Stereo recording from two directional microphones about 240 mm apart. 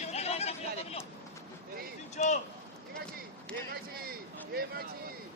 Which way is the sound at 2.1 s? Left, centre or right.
Left.